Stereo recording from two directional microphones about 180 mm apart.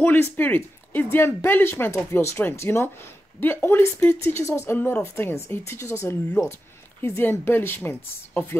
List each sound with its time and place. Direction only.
0.0 s speech: 10° left (ahead or behind)